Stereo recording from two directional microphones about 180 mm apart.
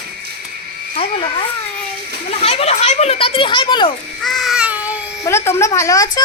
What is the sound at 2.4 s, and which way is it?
A child's voice, 35° left (ahead or behind).